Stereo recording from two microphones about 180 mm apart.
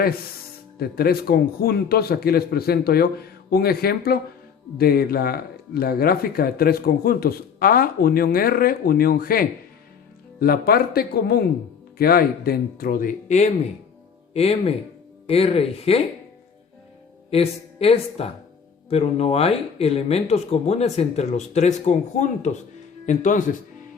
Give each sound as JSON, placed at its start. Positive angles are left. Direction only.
{"t": 0.8, "sound": "speech", "side_deg": 55}
{"t": 17.3, "sound": "speech", "side_deg": 35}